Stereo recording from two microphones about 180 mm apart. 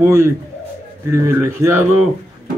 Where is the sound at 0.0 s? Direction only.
15° right (ahead or behind).